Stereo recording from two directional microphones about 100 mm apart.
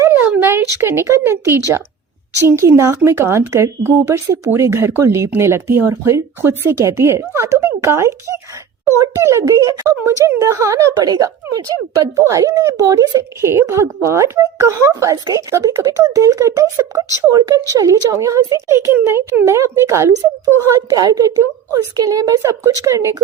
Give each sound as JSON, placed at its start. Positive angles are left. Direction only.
{"t": 0.0, "sound": "a sound", "side_deg": -25}
{"t": 0.8, "sound": "speech", "side_deg": -25}
{"t": 18.9, "sound": "speech", "side_deg": -20}